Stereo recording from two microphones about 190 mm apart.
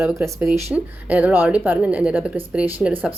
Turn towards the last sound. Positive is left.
turn(degrees=-5)  # may be behind; listen again after turning